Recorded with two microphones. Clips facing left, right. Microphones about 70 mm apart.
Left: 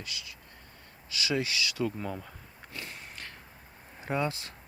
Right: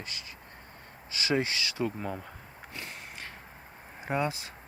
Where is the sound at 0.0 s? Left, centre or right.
Right.